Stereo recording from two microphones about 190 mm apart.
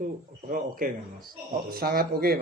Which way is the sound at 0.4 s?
45° right (ahead or behind).